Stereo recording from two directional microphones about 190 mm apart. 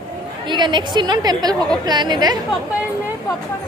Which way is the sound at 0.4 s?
25° right (ahead or behind).